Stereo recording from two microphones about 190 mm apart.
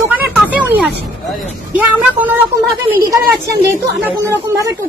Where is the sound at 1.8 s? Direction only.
10° right (ahead or behind).